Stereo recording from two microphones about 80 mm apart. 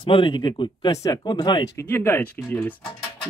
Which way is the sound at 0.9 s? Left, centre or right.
Left.